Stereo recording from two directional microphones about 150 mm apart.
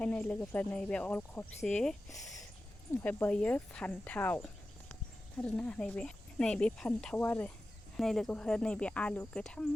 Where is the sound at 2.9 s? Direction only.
15° left (ahead or behind).